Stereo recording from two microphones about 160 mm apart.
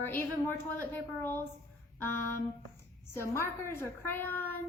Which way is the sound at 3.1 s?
15° left (ahead or behind).